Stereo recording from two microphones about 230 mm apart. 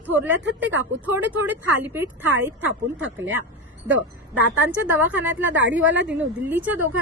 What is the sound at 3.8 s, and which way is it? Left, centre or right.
Speech, right.